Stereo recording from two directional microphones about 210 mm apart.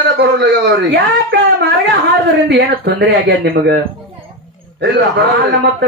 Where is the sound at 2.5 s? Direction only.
50° right (ahead or behind).